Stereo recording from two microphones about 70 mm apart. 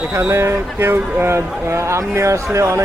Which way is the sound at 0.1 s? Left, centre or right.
Right.